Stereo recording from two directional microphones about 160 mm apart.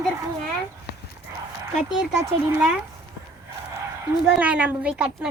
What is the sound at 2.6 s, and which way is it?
Speech, 5° right (ahead or behind).